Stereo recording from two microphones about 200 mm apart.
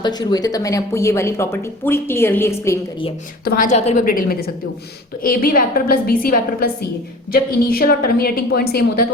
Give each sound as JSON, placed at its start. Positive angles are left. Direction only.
{"t": 0.0, "sound": "speech", "side_deg": 20}
{"t": 3.4, "sound": "a woman's voice", "side_deg": 45}